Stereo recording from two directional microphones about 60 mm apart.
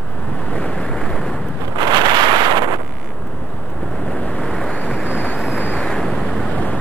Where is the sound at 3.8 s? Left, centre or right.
Centre.